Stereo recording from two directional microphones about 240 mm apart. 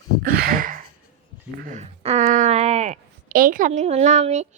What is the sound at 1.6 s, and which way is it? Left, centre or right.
A woman's voice, right.